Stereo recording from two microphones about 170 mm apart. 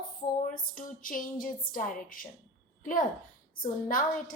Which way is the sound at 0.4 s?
50° left (ahead or behind).